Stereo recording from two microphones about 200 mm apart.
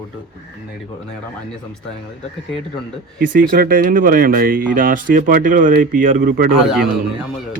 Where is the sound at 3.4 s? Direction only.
45° right (ahead or behind).